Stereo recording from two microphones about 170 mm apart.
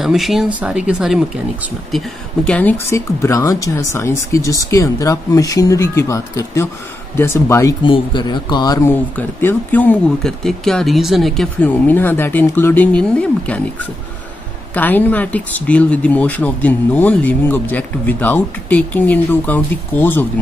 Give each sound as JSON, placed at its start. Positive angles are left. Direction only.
{"t": 0.0, "sound": "speech", "side_deg": 0}
{"t": 7.8, "sound": "speech", "side_deg": 30}
{"t": 14.7, "sound": "speech", "side_deg": 10}